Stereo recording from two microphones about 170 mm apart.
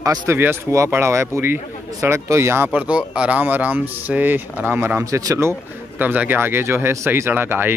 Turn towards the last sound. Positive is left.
turn(degrees=-15)  # may be behind; listen again after turning